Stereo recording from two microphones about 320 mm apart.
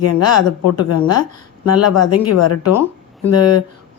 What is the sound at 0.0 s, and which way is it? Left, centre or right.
Speech, left.